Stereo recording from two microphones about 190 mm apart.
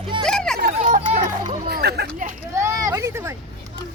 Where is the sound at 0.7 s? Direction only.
40° right (ahead or behind).